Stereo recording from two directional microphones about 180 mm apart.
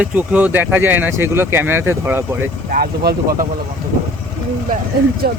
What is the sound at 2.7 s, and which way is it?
Speech, 55° right (ahead or behind).